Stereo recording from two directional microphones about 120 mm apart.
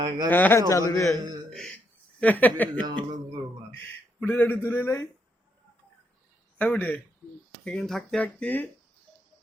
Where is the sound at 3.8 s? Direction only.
15° left (ahead or behind).